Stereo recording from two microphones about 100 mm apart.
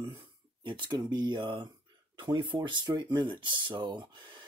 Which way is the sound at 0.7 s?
50° right (ahead or behind).